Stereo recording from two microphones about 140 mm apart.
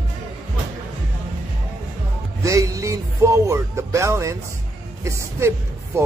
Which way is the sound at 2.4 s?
25° right (ahead or behind).